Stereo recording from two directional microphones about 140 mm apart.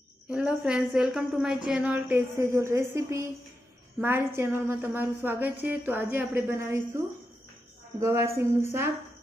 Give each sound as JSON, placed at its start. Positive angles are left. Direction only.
{"t": 0.3, "sound": "a woman's voice", "side_deg": -10}
{"t": 8.0, "sound": "a woman's voice", "side_deg": -20}